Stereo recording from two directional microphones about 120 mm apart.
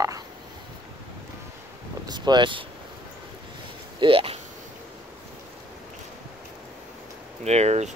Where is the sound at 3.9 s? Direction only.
45° right (ahead or behind).